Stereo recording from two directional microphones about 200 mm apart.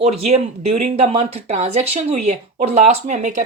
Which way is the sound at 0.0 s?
30° right (ahead or behind).